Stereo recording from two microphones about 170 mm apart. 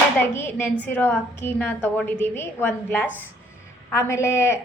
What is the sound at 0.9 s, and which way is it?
A woman's voice, 10° left (ahead or behind).